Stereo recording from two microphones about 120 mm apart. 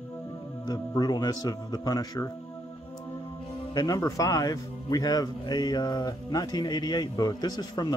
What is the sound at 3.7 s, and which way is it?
Speech, 30° left (ahead or behind).